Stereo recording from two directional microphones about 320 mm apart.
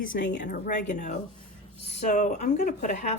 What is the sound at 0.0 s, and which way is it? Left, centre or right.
Speech, left.